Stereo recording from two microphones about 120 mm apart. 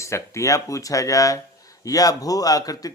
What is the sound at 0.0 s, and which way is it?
Speech, 25° left (ahead or behind).